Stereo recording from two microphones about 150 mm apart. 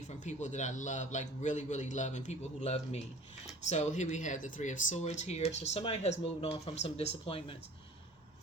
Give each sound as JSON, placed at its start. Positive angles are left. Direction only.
{"t": 0.1, "sound": "a man's voice", "side_deg": 50}